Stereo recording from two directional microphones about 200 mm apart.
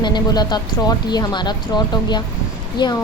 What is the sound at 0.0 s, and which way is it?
A woman's voice, 20° left (ahead or behind).